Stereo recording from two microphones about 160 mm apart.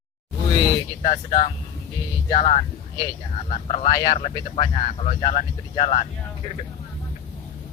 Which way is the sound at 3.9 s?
25° left (ahead or behind).